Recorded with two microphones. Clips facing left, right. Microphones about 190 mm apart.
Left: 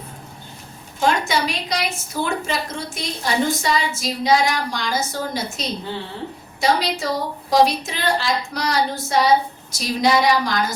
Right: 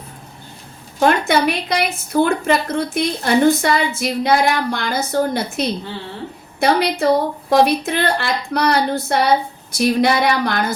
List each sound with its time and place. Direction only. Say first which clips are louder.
0.9 s a woman's voice: right 5 dB; 60° right (ahead or behind)